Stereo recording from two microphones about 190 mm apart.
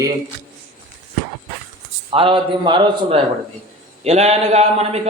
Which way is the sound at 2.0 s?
30° right (ahead or behind).